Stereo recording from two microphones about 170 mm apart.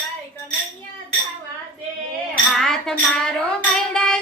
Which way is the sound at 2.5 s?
Centre (ahead or behind).